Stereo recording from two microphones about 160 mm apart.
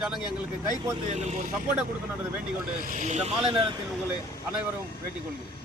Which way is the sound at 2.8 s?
50° right (ahead or behind).